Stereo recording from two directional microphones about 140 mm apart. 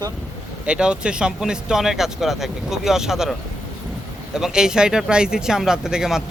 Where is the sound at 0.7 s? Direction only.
5° right (ahead or behind).